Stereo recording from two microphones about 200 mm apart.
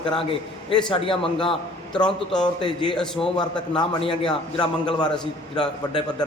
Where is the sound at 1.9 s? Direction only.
5° left (ahead or behind).